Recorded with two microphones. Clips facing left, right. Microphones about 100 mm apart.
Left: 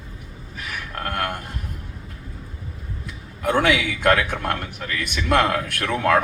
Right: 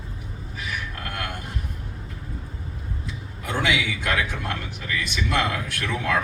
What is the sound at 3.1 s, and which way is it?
A man's voice, 55° left (ahead or behind).